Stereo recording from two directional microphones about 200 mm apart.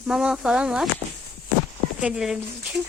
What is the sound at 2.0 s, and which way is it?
Speech, 5° right (ahead or behind).